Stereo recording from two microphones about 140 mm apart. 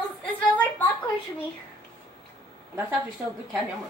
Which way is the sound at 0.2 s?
10° left (ahead or behind).